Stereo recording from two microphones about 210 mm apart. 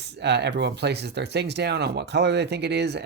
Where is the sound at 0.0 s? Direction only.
55° right (ahead or behind).